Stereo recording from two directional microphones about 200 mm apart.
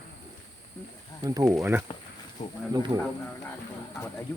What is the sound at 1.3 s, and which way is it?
Speech, 15° right (ahead or behind).